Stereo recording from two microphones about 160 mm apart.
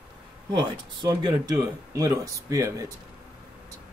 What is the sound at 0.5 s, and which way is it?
Speech, 25° right (ahead or behind).